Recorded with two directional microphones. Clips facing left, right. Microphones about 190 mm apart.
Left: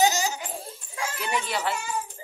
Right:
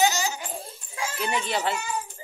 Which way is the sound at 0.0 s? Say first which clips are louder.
Left 1 dB; 40° left (ahead or behind).